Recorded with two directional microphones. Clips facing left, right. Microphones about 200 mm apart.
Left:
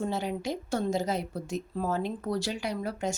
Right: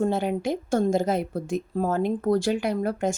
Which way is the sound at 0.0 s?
55° right (ahead or behind).